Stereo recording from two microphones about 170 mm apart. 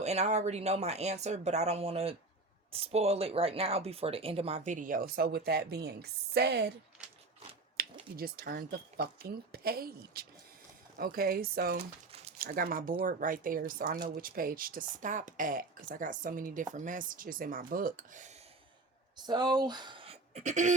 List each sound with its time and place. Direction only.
0.0 s speech: 40° right (ahead or behind); by 6.7 s 80° right
7.8 s a sound: 60° right (ahead or behind)
8.1 s speech: 60° right (ahead or behind)
19.1 s speech: 25° right (ahead or behind); by 20.7 s 45° right (ahead or behind)